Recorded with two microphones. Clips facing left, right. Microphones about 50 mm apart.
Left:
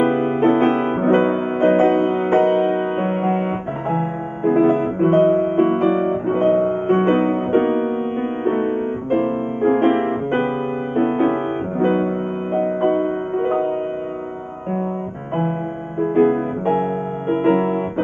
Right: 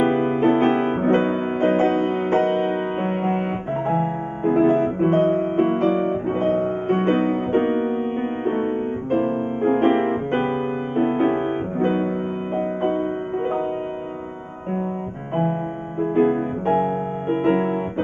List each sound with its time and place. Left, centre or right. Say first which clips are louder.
0.0 s music: left 2 dB; centre
4.5 s music: left 2 dB; centre
7.1 s music: left 3 dB; centre
7.6 s music: left 2 dB; centre
16.0 s music: left 3 dB; centre